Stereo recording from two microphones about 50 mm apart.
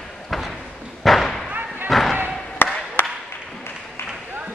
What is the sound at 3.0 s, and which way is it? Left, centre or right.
Applause, left.